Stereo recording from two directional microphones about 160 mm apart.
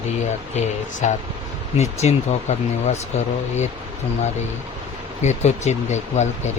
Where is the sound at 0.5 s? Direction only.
50° left (ahead or behind).